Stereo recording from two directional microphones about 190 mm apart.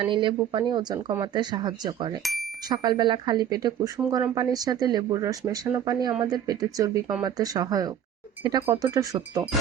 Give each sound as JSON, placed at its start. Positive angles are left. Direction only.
{"t": 0.0, "sound": "speech", "side_deg": -25}